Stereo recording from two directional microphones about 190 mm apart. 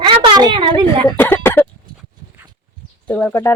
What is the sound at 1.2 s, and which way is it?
Throat clearing, 10° left (ahead or behind).